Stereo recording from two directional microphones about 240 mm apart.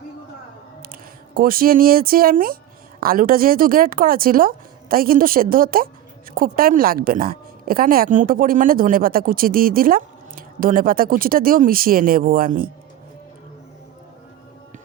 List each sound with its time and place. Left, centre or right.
0.8 s a woman's voice: right